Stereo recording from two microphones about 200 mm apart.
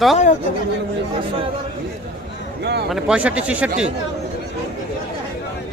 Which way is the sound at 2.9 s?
5° right (ahead or behind).